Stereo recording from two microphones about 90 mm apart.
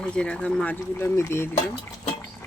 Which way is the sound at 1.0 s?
30° left (ahead or behind).